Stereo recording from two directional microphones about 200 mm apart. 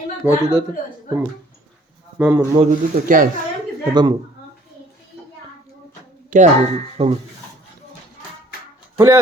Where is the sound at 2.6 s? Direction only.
40° right (ahead or behind).